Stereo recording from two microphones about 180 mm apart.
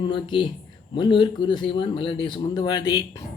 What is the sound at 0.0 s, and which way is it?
Speech, 25° left (ahead or behind).